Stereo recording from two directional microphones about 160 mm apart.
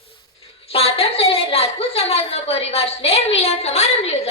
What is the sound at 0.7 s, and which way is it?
A woman's voice, 40° left (ahead or behind).